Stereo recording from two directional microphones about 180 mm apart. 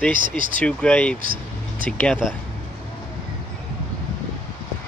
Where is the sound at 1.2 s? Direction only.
55° right (ahead or behind).